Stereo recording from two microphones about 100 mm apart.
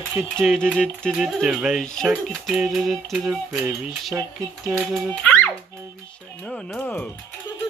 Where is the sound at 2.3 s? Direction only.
5° right (ahead or behind).